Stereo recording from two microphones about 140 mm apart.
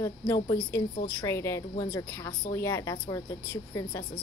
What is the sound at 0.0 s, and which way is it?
Speech, 20° left (ahead or behind).